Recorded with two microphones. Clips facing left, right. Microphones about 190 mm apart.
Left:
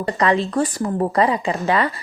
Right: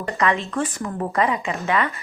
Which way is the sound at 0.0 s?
35° left (ahead or behind).